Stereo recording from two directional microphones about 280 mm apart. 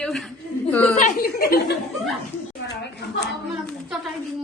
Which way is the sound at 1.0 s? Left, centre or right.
Left.